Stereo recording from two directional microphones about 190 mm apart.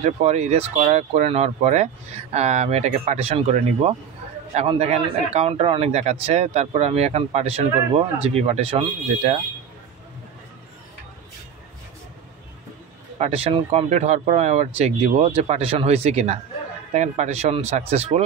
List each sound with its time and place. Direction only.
0.0 s speech: 35° right (ahead or behind)
13.2 s speech: 30° right (ahead or behind)